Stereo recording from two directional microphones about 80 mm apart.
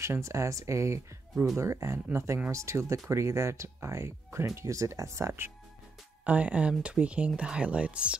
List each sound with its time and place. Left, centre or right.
0.0 s speech: right
6.2 s speech: centre